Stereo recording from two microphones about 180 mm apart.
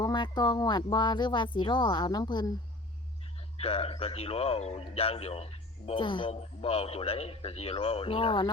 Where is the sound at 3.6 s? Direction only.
30° left (ahead or behind).